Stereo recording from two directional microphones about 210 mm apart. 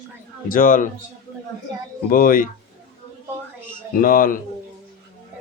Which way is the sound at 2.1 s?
40° left (ahead or behind).